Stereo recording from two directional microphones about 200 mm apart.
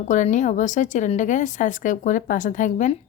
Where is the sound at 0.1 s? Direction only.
35° left (ahead or behind).